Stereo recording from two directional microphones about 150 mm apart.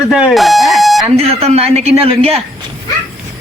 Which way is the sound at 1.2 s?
40° right (ahead or behind).